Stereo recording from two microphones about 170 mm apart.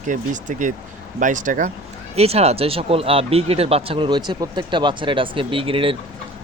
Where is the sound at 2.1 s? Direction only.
35° right (ahead or behind).